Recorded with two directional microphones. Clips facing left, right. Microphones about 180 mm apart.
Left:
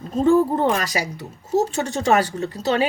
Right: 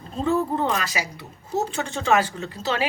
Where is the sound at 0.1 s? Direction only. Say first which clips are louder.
Left 6 dB; 45° left (ahead or behind).